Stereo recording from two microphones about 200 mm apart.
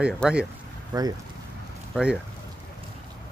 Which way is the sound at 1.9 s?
5° right (ahead or behind).